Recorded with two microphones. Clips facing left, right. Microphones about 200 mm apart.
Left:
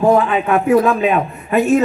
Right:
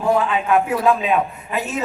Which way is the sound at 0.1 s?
55° left (ahead or behind).